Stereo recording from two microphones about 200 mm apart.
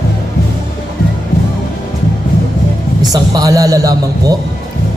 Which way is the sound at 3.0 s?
20° right (ahead or behind).